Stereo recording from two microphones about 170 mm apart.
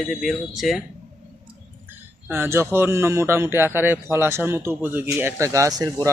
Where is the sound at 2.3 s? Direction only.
15° right (ahead or behind).